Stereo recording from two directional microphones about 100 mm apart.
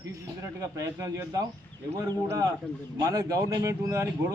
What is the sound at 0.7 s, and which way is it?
Speech, 30° right (ahead or behind).